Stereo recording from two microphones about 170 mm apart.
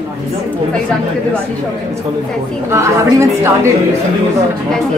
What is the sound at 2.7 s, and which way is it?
A woman's voice, 15° right (ahead or behind).